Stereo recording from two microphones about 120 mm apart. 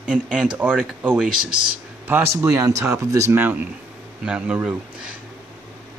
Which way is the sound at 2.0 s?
20° right (ahead or behind).